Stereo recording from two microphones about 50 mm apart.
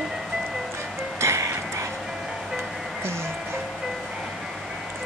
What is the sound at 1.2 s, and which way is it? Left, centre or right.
Music, right.